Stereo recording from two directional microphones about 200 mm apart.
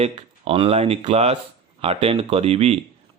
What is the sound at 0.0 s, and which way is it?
Speech, 30° right (ahead or behind).